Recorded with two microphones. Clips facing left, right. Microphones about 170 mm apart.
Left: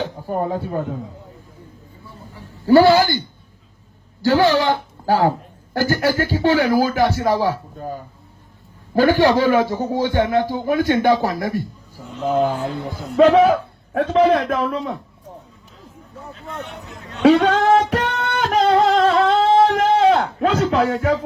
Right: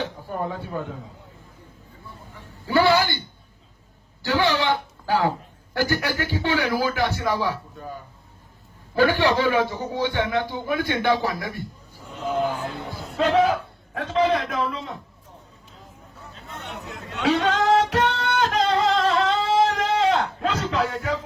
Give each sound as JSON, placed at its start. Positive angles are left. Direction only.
{"t": 0.2, "sound": "speech", "side_deg": 40}
{"t": 2.6, "sound": "a man's voice", "side_deg": 40}
{"t": 4.2, "sound": "a man's voice", "side_deg": 40}
{"t": 17.2, "sound": "singing", "side_deg": 55}
{"t": 19.6, "sound": "a sound", "side_deg": 55}
{"t": 20.4, "sound": "music", "side_deg": 50}